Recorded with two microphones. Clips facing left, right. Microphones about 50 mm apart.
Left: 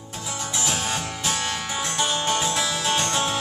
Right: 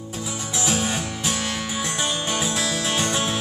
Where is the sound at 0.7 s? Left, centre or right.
Centre.